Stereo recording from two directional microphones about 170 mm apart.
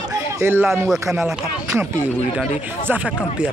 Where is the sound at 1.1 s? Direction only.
Centre (ahead or behind).